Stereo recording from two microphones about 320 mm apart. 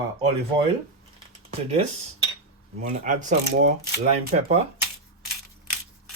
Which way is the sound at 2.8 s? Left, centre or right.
Right.